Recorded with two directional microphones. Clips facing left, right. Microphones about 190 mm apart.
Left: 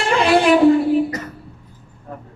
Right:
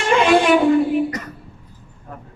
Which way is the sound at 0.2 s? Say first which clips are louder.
Left 2 dB; 35° left (ahead or behind).